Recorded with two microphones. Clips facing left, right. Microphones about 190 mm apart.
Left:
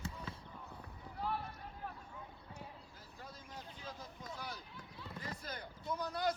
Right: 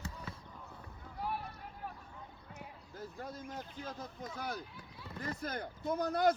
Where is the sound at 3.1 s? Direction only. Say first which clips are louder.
Right 6 dB; 50° right (ahead or behind).